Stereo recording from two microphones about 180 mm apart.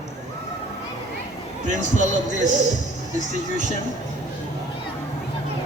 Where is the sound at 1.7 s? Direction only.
45° right (ahead or behind).